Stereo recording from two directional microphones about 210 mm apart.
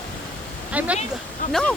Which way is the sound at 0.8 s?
5° right (ahead or behind).